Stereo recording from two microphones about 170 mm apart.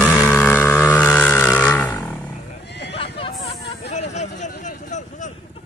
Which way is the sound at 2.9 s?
35° left (ahead or behind).